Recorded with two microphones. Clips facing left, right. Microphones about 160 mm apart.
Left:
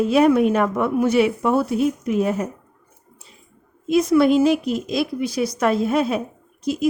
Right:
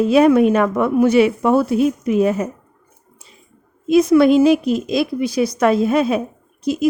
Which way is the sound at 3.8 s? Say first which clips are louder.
Right 4 dB; 90° right.